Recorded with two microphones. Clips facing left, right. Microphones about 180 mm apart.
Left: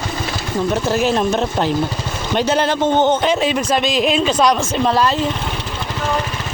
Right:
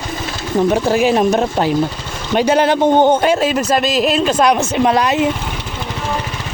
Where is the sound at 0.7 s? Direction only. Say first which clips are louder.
Right 2 dB; 10° right (ahead or behind).